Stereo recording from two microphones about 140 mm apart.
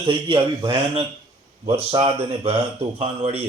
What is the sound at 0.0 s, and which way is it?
A man's voice, 35° right (ahead or behind).